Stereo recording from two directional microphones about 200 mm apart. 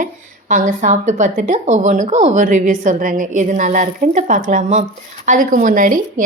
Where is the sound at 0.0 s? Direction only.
40° right (ahead or behind).